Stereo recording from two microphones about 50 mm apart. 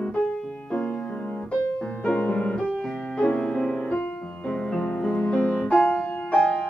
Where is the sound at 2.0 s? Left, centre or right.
Left.